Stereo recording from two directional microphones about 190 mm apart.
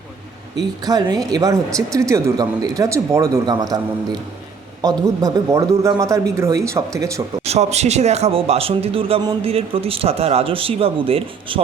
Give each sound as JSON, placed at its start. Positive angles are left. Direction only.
{"t": 0.9, "sound": "a man's voice", "side_deg": -20}
{"t": 7.4, "sound": "a man's voice", "side_deg": -35}